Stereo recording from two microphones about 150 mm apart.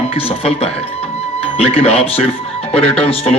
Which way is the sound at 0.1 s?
40° left (ahead or behind).